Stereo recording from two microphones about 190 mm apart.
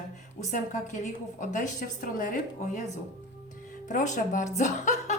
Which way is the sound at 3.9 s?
40° left (ahead or behind).